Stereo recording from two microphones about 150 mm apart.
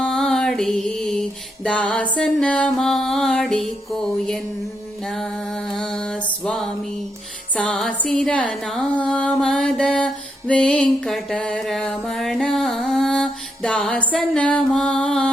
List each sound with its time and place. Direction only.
0.0 s music: 5° left (ahead or behind)
2.1 s mantra: 10° left (ahead or behind)
5.0 s mantra: 5° left (ahead or behind)
7.5 s music: 10° left (ahead or behind)